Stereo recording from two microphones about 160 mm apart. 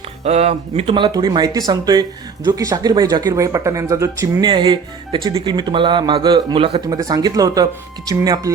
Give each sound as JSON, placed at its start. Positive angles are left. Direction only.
{"t": 0.3, "sound": "speech", "side_deg": -40}